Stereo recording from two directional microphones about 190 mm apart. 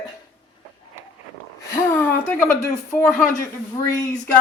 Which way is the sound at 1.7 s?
10° left (ahead or behind).